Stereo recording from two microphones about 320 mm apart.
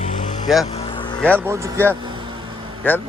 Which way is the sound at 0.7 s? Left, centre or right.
Centre.